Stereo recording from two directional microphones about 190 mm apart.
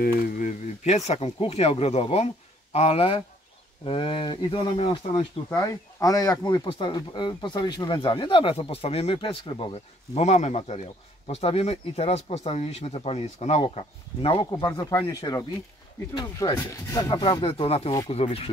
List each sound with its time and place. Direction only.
0.0 s speech: 40° left (ahead or behind)
14.5 s speech: 20° left (ahead or behind)